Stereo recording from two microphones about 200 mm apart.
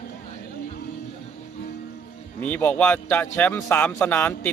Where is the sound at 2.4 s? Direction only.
10° left (ahead or behind).